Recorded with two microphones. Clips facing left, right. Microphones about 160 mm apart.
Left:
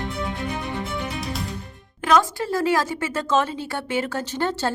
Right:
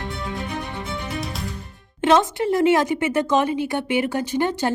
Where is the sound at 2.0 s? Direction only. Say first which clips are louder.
Right 2 dB; 25° right (ahead or behind).